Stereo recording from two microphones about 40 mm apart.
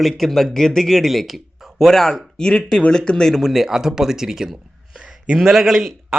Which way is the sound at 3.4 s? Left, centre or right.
Centre.